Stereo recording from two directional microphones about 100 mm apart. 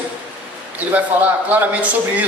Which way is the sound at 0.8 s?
15° right (ahead or behind).